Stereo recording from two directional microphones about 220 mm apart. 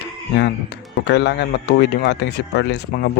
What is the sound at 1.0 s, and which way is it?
Speech, 50° left (ahead or behind).